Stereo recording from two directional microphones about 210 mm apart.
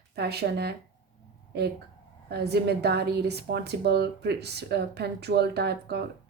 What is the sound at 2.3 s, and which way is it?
A woman's voice, 50° right (ahead or behind).